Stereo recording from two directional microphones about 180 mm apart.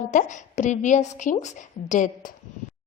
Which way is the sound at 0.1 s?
45° left (ahead or behind).